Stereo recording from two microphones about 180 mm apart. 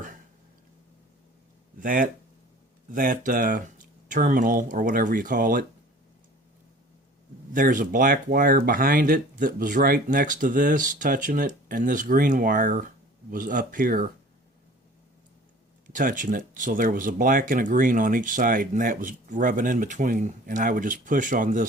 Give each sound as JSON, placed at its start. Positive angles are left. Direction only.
{"t": 1.8, "sound": "speech", "side_deg": -50}
{"t": 7.5, "sound": "speech", "side_deg": -50}
{"t": 15.9, "sound": "speech", "side_deg": -45}